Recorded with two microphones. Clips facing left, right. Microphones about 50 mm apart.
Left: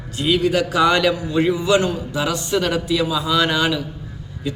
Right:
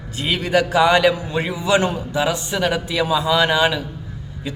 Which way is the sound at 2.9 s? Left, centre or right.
Right.